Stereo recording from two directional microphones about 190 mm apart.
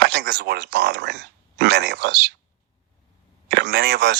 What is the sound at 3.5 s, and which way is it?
Speech, 55° right (ahead or behind).